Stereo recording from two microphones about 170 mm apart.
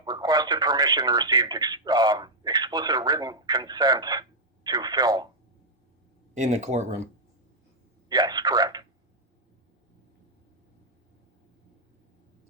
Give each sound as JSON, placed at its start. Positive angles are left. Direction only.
{"t": 0.0, "sound": "speech", "side_deg": -25}
{"t": 6.3, "sound": "speech", "side_deg": -45}
{"t": 8.1, "sound": "speech", "side_deg": -25}